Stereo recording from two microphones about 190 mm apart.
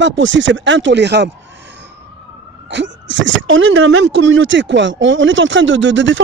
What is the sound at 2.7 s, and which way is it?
Speech, 75° right (ahead or behind).